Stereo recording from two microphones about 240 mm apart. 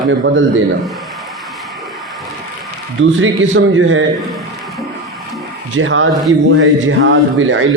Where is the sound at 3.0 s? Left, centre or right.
Right.